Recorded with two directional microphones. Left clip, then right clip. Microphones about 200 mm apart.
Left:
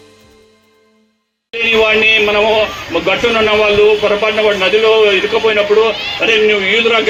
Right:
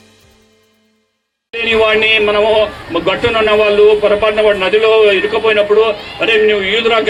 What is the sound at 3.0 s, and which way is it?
Speech, 30° left (ahead or behind).